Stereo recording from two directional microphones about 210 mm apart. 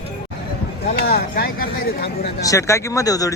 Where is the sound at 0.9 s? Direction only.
45° left (ahead or behind).